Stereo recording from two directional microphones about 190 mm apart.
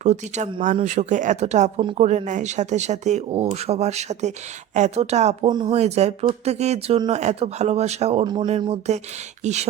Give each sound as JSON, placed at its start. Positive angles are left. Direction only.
{"t": 0.0, "sound": "speech", "side_deg": -40}
{"t": 1.8, "sound": "speech", "side_deg": -25}
{"t": 2.0, "sound": "speech", "side_deg": -40}
{"t": 5.5, "sound": "speech", "side_deg": -20}
{"t": 5.7, "sound": "speech", "side_deg": -35}
{"t": 9.4, "sound": "a sound", "side_deg": -35}